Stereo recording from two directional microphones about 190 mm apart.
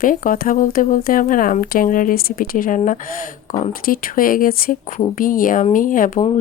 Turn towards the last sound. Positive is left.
turn(degrees=45)  # may be behind; listen again after turning